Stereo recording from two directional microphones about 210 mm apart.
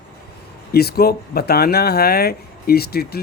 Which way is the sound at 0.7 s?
50° left (ahead or behind).